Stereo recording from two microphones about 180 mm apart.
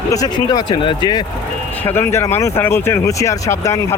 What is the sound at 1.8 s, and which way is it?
Speech, 10° left (ahead or behind).